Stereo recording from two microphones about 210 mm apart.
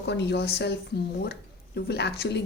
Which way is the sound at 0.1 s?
55° left (ahead or behind).